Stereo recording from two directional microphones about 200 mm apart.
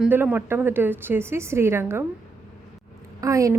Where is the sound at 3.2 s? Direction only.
15° right (ahead or behind).